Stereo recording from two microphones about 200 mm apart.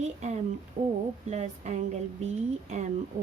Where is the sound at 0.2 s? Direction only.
35° right (ahead or behind).